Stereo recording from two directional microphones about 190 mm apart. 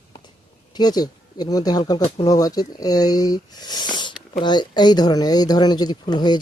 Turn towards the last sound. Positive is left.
turn(degrees=20)  # may be behind; listen again after turning